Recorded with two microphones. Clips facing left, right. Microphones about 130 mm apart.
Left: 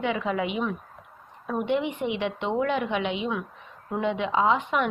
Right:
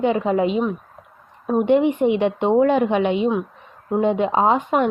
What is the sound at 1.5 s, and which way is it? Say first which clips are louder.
A woman's voice: right 10 dB; 50° right (ahead or behind).